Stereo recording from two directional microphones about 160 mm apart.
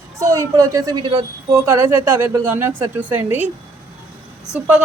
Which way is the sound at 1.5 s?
15° right (ahead or behind).